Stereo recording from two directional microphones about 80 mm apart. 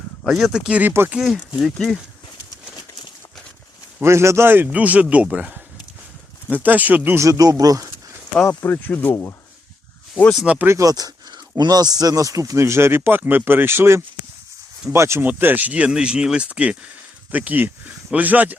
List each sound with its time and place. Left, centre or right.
0.2 s speech: centre
0.7 s speech: right
1.1 s speech: centre
4.0 s speech: right
7.2 s speech: right
8.4 s speech: left
10.4 s speech: centre
10.7 s speech: right
15.3 s speech: right